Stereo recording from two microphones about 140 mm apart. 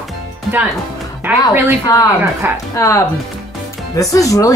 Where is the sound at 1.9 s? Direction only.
25° left (ahead or behind).